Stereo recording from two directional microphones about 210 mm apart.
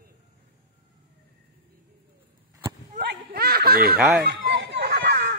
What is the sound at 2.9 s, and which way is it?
Snicker, 45° right (ahead or behind).